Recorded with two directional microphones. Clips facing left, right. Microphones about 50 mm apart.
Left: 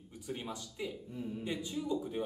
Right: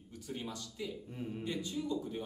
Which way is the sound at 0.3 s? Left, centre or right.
Centre.